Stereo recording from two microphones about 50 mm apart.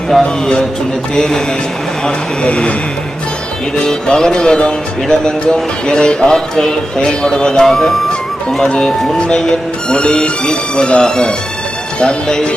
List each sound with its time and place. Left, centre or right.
0.1 s speech: centre
3.8 s speech: centre